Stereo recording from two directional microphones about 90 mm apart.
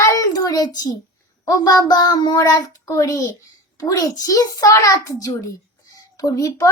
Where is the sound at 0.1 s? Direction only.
40° left (ahead or behind).